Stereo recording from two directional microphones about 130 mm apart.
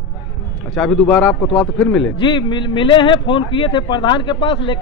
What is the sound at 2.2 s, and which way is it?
Speech, 35° left (ahead or behind).